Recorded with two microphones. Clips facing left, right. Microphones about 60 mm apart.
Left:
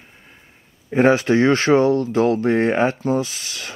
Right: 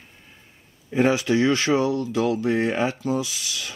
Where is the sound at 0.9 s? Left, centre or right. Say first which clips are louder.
Left 5 dB; left.